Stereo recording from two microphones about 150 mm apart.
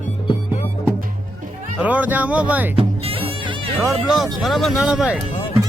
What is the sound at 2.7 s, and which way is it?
Music, 40° right (ahead or behind).